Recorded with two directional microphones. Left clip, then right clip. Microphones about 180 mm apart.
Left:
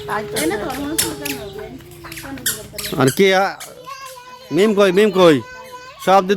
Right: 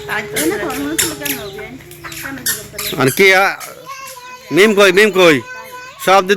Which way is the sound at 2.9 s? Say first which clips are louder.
Right 4 dB; 25° left (ahead or behind).